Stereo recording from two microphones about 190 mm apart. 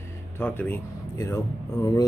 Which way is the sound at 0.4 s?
10° left (ahead or behind).